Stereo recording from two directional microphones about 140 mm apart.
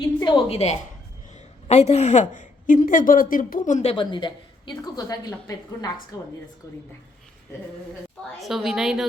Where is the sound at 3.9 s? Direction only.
35° left (ahead or behind).